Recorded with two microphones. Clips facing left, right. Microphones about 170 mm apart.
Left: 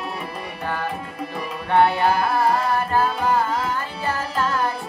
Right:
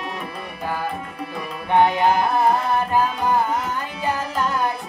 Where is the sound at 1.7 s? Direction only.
15° right (ahead or behind).